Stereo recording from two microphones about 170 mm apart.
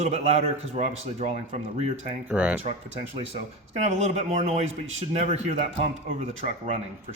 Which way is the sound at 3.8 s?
40° right (ahead or behind).